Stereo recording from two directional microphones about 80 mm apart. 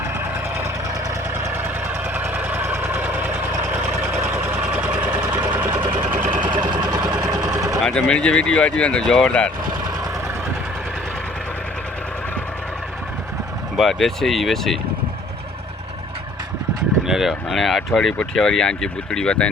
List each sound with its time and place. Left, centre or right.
2.3 s vehicle: right
6.1 s vehicle: right
6.4 s vehicle: right
6.8 s vehicle: right
7.9 s speech: centre
13.7 s speech: centre
17.1 s speech: centre